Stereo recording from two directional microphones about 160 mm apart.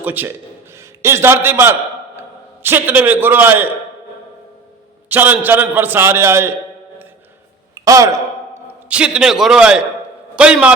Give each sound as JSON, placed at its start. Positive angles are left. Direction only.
{"t": 0.0, "sound": "a man's voice", "side_deg": -10}
{"t": 5.0, "sound": "a man's voice", "side_deg": -10}
{"t": 7.9, "sound": "sigh", "side_deg": -20}
{"t": 8.9, "sound": "a man's voice", "side_deg": -5}